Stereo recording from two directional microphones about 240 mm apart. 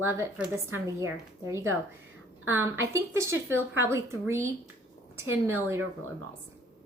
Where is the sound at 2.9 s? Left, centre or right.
Centre.